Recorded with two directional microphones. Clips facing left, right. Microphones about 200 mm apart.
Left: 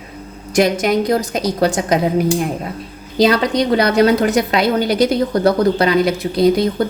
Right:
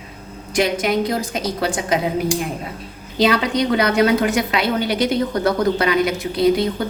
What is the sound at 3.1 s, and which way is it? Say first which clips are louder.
A woman's voice: left 3 dB; 40° left (ahead or behind).